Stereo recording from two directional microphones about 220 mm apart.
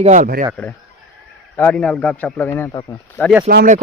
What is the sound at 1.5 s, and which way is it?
Speech, 10° left (ahead or behind).